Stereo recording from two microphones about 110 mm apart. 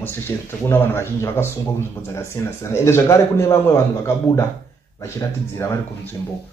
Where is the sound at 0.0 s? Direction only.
20° left (ahead or behind).